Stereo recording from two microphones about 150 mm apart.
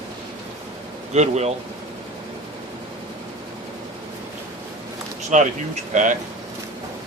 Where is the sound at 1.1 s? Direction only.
50° right (ahead or behind).